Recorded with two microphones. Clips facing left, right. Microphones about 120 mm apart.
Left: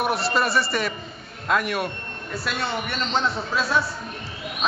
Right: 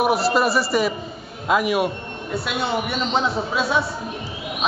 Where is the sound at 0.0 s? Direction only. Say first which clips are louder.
Right 5 dB; centre (ahead or behind).